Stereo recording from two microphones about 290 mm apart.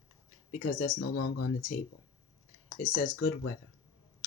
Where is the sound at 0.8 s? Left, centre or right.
Left.